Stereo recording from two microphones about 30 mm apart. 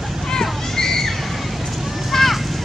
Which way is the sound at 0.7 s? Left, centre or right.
Centre.